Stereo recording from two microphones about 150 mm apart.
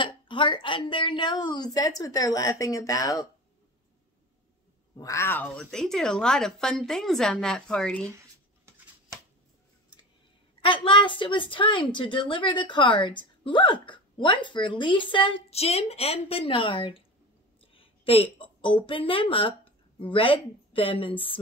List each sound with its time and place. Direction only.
0.0 s a woman's voice: 35° left (ahead or behind)
4.9 s a woman's voice: 20° left (ahead or behind)
5.6 s a woman's voice: 5° left (ahead or behind)
8.6 s a sound: 20° right (ahead or behind)
10.6 s a woman's voice: 35° left (ahead or behind)